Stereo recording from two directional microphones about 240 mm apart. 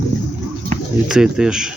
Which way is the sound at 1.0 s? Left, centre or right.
Centre.